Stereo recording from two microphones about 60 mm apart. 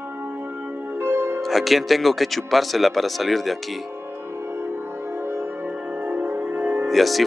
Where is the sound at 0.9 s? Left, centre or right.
Right.